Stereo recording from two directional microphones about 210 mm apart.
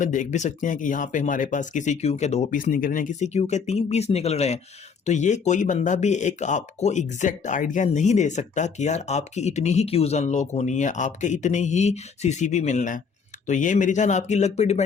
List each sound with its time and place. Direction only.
0.0 s speech: 35° left (ahead or behind)